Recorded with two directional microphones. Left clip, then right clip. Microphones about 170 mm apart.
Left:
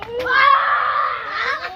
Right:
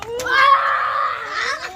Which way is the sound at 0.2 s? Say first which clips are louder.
Even; 30° right (ahead or behind).